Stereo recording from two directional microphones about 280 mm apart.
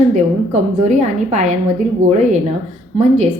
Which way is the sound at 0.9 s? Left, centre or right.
Right.